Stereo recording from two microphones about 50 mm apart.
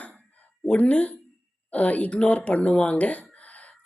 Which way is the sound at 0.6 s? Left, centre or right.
Left.